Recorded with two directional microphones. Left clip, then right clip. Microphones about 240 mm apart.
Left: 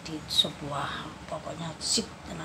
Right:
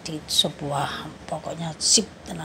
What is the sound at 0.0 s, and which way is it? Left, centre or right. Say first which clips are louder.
A woman's voice: right 4 dB; right.